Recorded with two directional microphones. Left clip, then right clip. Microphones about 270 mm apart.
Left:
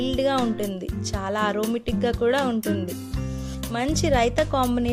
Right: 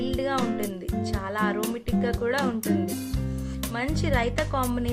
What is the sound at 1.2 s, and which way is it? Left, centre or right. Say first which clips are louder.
Speech: left 4 dB; left.